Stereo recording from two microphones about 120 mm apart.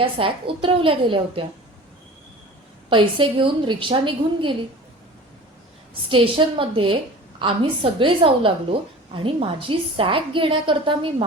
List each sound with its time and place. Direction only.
0.0 s a woman's voice: 45° right (ahead or behind)
2.9 s a woman's voice: 45° right (ahead or behind)
6.1 s a woman's voice: 45° right (ahead or behind)